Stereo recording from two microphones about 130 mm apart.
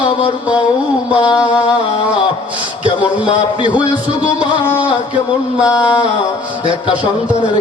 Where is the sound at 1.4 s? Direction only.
10° right (ahead or behind).